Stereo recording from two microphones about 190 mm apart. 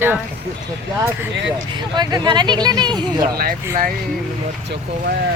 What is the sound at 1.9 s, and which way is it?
Speech, 25° right (ahead or behind).